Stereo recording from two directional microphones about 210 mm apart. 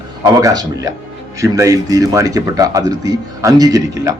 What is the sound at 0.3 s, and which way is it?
A man's voice, 15° right (ahead or behind).